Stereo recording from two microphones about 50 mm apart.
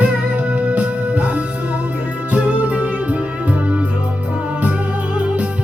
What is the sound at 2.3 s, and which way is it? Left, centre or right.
Music, right.